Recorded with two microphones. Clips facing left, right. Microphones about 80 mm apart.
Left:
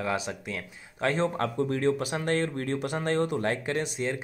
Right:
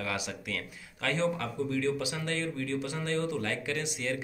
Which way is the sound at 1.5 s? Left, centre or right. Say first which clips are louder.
Left 4 dB; left.